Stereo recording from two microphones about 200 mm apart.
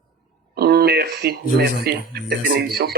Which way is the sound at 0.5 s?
55° right (ahead or behind).